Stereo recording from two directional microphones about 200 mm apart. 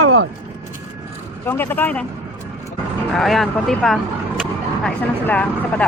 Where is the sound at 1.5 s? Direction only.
10° left (ahead or behind).